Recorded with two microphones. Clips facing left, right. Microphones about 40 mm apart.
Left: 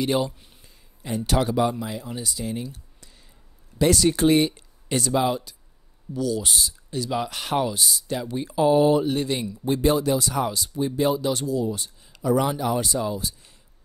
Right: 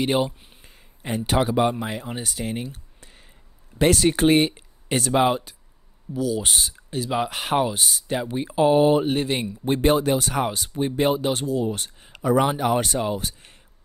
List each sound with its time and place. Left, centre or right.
0.0 s speech: right
0.7 s a sound: right
1.2 s speech: right
1.6 s speech: right
6.1 s speech: centre
6.4 s speech: right